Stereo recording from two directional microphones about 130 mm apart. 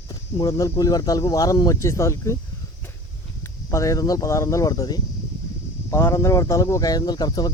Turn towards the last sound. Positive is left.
turn(degrees=30)  # may be behind; listen again after turning